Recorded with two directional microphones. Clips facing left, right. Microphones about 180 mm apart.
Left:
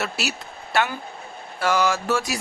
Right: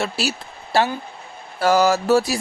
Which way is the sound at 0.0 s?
30° right (ahead or behind).